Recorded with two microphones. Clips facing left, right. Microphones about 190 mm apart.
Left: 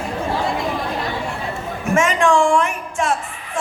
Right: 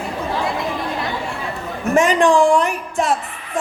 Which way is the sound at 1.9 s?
35° right (ahead or behind).